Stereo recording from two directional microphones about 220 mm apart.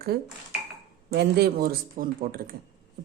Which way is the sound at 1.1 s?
50° right (ahead or behind).